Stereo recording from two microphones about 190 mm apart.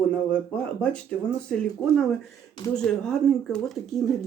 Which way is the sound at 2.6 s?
20° left (ahead or behind).